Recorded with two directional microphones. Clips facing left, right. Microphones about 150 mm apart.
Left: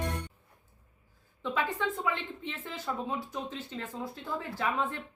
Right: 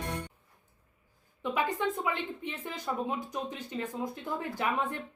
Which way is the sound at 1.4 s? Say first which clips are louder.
Right 1 dB; 15° right (ahead or behind).